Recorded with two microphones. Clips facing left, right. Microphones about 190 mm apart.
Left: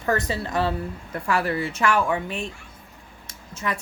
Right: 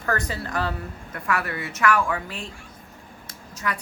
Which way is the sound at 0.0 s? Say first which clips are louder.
Left 3 dB; 20° left (ahead or behind).